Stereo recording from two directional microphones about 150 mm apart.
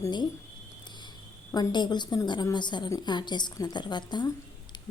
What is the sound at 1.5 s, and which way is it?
A woman's voice, 30° left (ahead or behind).